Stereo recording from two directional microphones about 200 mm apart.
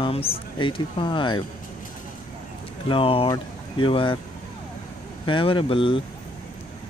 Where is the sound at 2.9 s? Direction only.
25° left (ahead or behind).